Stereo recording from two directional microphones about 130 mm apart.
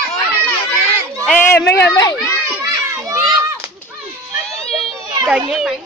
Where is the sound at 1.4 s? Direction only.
20° left (ahead or behind).